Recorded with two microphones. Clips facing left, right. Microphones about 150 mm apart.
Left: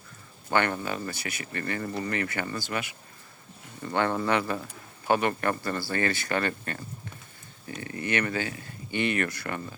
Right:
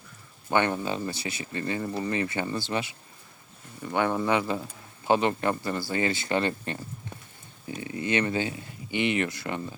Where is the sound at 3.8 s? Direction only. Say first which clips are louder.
Right 1 dB; 15° right (ahead or behind).